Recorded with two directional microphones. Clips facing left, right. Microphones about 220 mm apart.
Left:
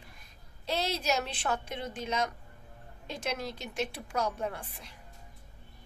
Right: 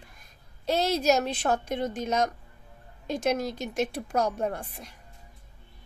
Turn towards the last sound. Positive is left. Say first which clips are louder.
# right 6 dB
turn(degrees=-45)  # may be behind; listen again after turning